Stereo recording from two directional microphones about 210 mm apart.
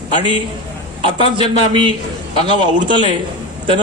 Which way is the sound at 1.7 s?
20° right (ahead or behind).